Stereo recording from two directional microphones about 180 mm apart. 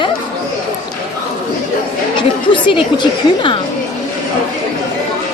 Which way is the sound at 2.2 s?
25° left (ahead or behind).